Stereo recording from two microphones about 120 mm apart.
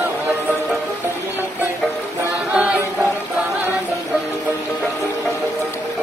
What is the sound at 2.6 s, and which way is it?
A capella, 10° right (ahead or behind).